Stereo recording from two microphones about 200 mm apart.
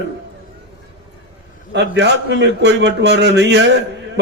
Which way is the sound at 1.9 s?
60° right (ahead or behind).